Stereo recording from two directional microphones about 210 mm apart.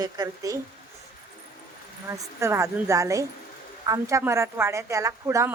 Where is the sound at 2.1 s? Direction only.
15° right (ahead or behind).